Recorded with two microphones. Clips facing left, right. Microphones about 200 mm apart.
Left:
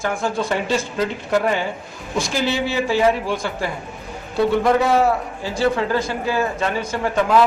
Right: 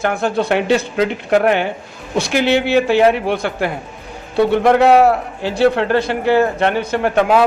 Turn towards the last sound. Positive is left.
turn(degrees=-65)  # may be behind; listen again after turning